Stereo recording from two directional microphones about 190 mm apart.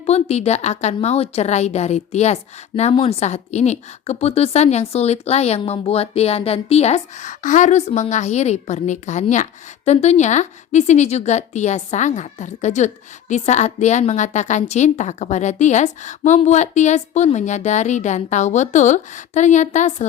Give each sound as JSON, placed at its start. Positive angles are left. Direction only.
{"t": 0.0, "sound": "a woman's voice", "side_deg": 35}